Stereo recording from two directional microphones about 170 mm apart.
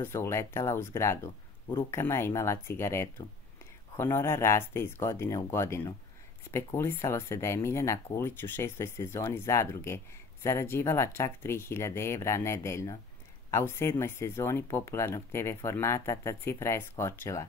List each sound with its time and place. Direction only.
0.0 s speech: 15° left (ahead or behind)